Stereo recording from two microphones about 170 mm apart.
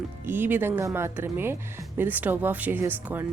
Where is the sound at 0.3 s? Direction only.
10° right (ahead or behind).